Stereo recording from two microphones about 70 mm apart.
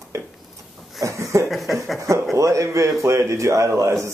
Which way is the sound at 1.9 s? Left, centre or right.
Right.